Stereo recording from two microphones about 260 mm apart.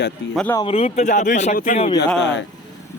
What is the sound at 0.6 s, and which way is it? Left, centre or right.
Speech, left.